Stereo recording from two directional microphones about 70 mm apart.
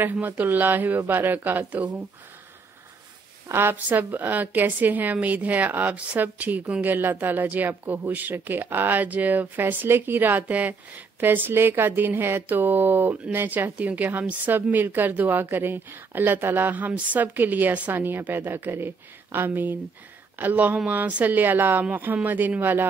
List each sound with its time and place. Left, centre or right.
0.0 s speech: right
3.5 s speech: right